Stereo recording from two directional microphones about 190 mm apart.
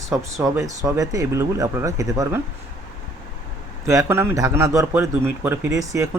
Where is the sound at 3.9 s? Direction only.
15° right (ahead or behind).